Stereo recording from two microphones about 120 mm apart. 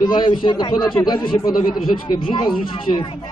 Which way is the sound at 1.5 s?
5° right (ahead or behind).